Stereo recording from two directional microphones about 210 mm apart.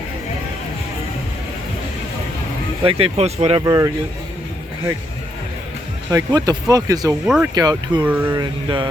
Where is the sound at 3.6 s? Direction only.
15° right (ahead or behind).